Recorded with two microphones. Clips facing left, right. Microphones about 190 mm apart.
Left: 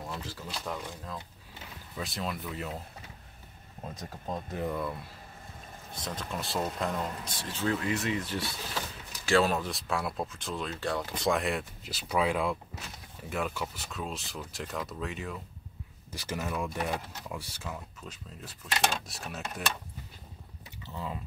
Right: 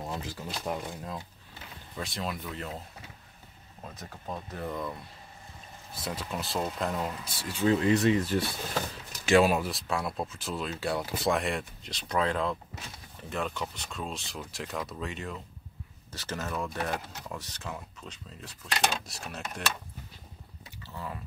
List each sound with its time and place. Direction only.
0.0 s speech: 20° right (ahead or behind)
2.0 s speech: centre (ahead or behind)
3.9 s speech: 15° left (ahead or behind)
5.9 s speech: 5° right (ahead or behind)
7.8 s speech: 35° right (ahead or behind)
9.2 s speech: 15° right (ahead or behind); by 15.3 s centre (ahead or behind)
16.1 s speech: 10° left (ahead or behind)
20.8 s speech: 15° left (ahead or behind)